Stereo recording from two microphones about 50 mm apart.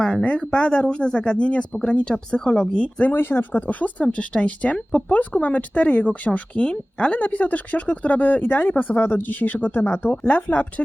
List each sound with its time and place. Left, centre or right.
0.3 s speech: left
3.1 s speech: left
3.7 s speech: left
7.2 s speech: left